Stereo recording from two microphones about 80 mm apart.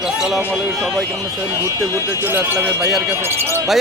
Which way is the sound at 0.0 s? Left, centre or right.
Centre.